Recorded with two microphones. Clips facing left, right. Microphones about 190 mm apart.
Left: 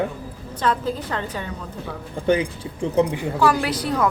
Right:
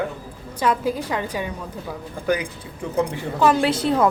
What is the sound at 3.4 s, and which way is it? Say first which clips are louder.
Speech: right 3 dB; 25° right (ahead or behind).